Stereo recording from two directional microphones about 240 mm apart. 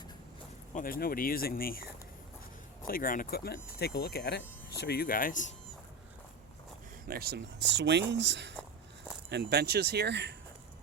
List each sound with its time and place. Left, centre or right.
0.7 s speech: left
7.1 s speech: right